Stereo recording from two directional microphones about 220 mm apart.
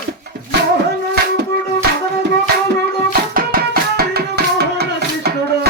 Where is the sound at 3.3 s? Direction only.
40° right (ahead or behind).